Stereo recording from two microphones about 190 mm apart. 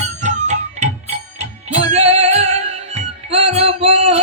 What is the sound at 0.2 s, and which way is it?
Music, 40° right (ahead or behind).